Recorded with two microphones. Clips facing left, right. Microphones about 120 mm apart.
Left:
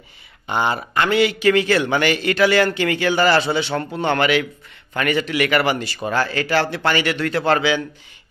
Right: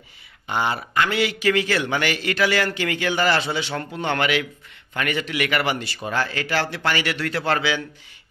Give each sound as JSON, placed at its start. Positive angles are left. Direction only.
{"t": 0.5, "sound": "a man's voice", "side_deg": 30}